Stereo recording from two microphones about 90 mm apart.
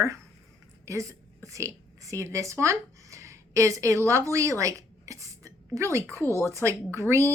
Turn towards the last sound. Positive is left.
turn(degrees=-35)  # may be behind; listen again after turning